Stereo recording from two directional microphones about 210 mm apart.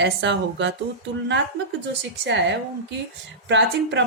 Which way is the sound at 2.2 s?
55° right (ahead or behind).